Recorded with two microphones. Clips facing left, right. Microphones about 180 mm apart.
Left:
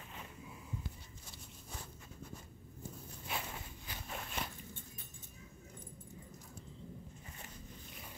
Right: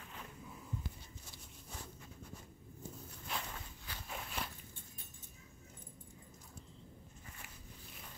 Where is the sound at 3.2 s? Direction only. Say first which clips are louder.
Left 1 dB; 10° left (ahead or behind).